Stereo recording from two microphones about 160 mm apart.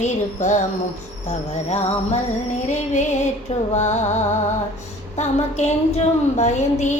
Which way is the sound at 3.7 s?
45° left (ahead or behind).